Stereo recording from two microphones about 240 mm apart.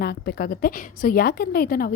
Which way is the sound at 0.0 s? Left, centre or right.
Left.